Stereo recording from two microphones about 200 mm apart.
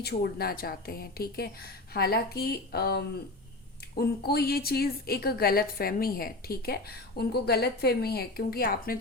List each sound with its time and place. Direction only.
0.0 s a woman's voice: 50° left (ahead or behind)